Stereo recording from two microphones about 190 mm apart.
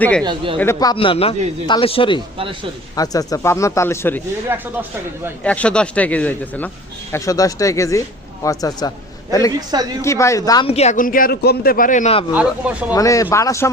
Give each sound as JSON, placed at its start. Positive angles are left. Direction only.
{"t": 0.0, "sound": "a woman's voice", "side_deg": 5}
{"t": 0.6, "sound": "a man's voice", "side_deg": 15}
{"t": 4.4, "sound": "speech", "side_deg": -10}
{"t": 5.4, "sound": "a man's voice", "side_deg": 5}
{"t": 10.0, "sound": "speech", "side_deg": 15}
{"t": 10.7, "sound": "a man's voice", "side_deg": 35}
{"t": 12.3, "sound": "speech", "side_deg": -5}
{"t": 12.9, "sound": "speech", "side_deg": 15}